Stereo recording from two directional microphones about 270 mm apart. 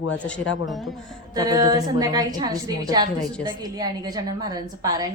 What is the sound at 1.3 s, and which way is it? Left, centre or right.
A woman's voice, centre.